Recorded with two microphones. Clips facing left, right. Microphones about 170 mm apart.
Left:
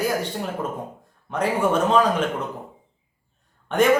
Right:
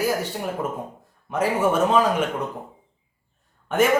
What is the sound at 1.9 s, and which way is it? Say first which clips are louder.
Speech: left 1 dB; 5° right (ahead or behind).